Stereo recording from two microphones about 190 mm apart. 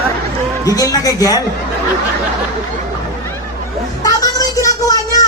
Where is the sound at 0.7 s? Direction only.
20° left (ahead or behind).